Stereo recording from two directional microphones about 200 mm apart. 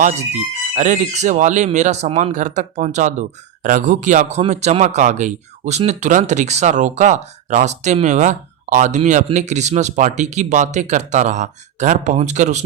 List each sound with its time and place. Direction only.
0.8 s speech: 40° right (ahead or behind)